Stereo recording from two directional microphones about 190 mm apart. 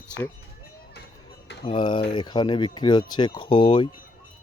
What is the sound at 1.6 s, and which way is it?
Speech, 25° left (ahead or behind).